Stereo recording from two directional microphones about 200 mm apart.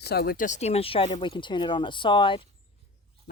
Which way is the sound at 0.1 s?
50° left (ahead or behind).